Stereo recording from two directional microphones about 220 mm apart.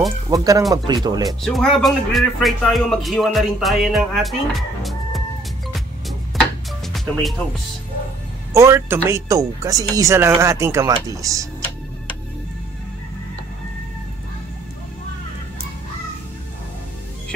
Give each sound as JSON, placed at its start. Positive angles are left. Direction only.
{"t": 0.3, "sound": "speech", "side_deg": -15}
{"t": 1.4, "sound": "speech", "side_deg": 0}
{"t": 6.9, "sound": "speech", "side_deg": 0}
{"t": 8.5, "sound": "speech", "side_deg": -10}